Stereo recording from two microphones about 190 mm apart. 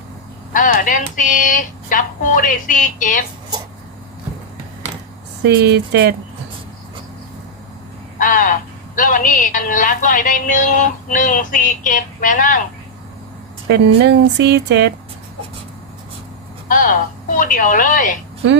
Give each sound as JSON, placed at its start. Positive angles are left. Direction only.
{"t": 0.5, "sound": "speech", "side_deg": 45}
{"t": 5.4, "sound": "speech", "side_deg": -60}
{"t": 8.2, "sound": "a sound", "side_deg": 45}
{"t": 9.0, "sound": "speech", "side_deg": 45}
{"t": 13.7, "sound": "speech", "side_deg": -65}
{"t": 16.6, "sound": "speech", "side_deg": 45}